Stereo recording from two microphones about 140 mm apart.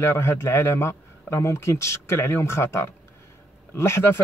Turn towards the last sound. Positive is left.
turn(degrees=20)  # may be behind; listen again after turning